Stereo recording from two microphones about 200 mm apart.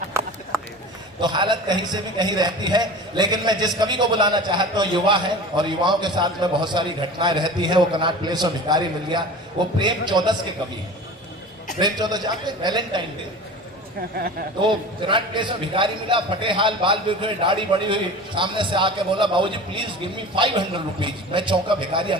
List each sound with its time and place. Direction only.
1.2 s a man's voice: 20° right (ahead or behind)
11.8 s a man's voice: 20° right (ahead or behind)
14.6 s a man's voice: 25° right (ahead or behind)